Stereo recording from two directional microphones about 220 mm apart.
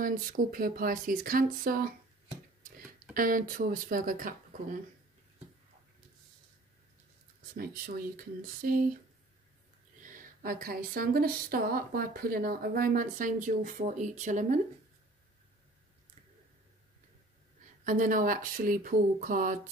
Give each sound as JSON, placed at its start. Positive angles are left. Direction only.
{"t": 0.0, "sound": "speech", "side_deg": -40}
{"t": 3.2, "sound": "speech", "side_deg": -40}
{"t": 7.5, "sound": "speech", "side_deg": -40}
{"t": 10.0, "sound": "speech", "side_deg": -35}
{"t": 17.8, "sound": "speech", "side_deg": -35}